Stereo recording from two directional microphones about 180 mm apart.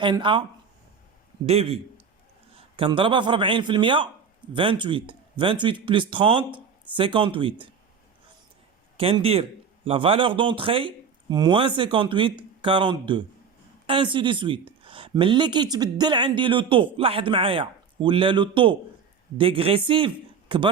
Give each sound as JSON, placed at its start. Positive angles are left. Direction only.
{"t": 0.0, "sound": "speech", "side_deg": -25}
{"t": 1.5, "sound": "a man's voice", "side_deg": -35}
{"t": 9.0, "sound": "a man's voice", "side_deg": -30}